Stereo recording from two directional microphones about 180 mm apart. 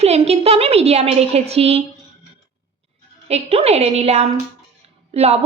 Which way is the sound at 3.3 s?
35° right (ahead or behind).